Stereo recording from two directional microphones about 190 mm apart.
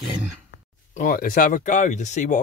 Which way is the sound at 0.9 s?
45° left (ahead or behind).